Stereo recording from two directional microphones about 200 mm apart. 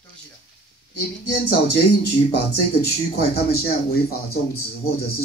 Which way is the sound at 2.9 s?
50° left (ahead or behind).